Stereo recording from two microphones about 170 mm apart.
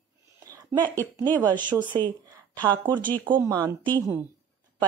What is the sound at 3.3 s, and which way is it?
Speech, 20° right (ahead or behind).